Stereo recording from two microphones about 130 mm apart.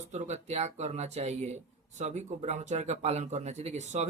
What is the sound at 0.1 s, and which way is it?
Speech, 60° right (ahead or behind).